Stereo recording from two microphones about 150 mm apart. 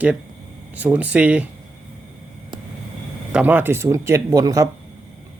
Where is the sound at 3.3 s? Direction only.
10° right (ahead or behind).